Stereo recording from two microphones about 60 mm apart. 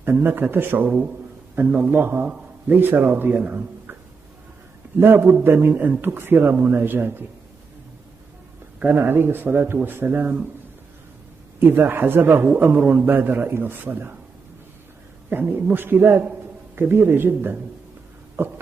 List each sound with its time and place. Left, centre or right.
0.0 s a man's voice: right
0.9 s a sound: right
1.8 s a man's voice: right
4.9 s a man's voice: right
8.9 s a man's voice: right
11.6 s a man's voice: right
15.2 s a man's voice: right